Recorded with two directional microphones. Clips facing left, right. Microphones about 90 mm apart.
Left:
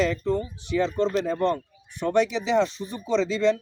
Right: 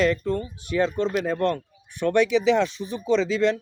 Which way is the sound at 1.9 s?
65° right (ahead or behind).